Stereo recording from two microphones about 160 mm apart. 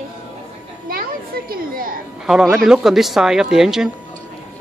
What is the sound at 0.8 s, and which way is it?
Children playing, 70° right (ahead or behind).